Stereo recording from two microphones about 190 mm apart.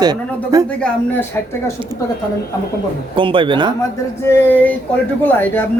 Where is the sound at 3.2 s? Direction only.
25° right (ahead or behind).